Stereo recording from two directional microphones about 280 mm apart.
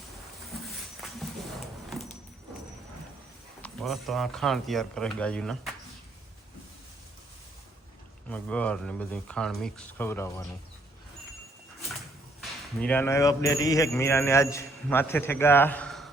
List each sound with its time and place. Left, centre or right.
3.6 s speech: centre
8.3 s speech: centre
12.4 s speech: centre